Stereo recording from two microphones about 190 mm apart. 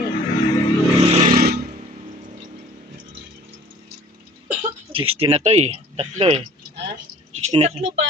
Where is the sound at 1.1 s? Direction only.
45° right (ahead or behind).